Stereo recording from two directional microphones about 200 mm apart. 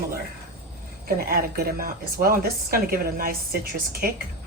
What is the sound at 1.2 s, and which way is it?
Speech, 50° right (ahead or behind).